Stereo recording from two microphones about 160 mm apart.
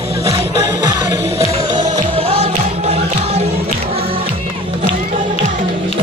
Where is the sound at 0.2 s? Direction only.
40° right (ahead or behind).